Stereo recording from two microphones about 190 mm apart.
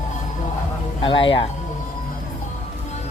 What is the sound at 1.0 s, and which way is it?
Speech, 25° left (ahead or behind).